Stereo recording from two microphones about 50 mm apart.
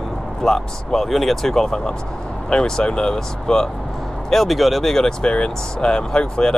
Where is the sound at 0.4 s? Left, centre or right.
Centre.